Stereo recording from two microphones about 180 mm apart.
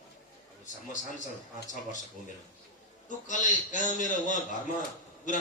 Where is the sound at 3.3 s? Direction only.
45° left (ahead or behind).